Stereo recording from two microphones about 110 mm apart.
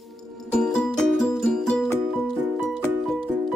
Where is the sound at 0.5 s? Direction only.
5° left (ahead or behind).